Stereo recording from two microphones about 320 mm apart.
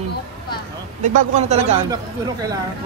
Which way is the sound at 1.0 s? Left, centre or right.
Right.